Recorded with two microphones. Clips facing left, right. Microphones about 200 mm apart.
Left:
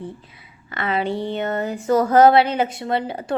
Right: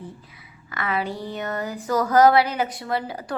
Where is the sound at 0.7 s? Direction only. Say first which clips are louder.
Left 4 dB; 25° left (ahead or behind).